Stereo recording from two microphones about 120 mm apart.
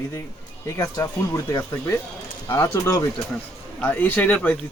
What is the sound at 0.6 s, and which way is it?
Speech, 20° left (ahead or behind).